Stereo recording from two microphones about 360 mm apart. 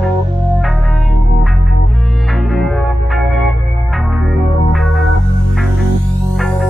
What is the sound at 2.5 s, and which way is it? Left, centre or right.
Music, centre.